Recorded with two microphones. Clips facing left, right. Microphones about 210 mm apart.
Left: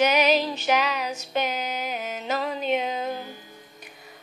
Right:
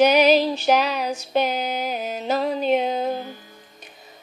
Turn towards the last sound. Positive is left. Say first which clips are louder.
# right 5 dB
turn(degrees=-35)  # may be behind; listen again after turning